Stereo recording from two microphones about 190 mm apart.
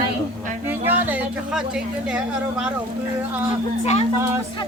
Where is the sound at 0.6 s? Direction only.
10° right (ahead or behind).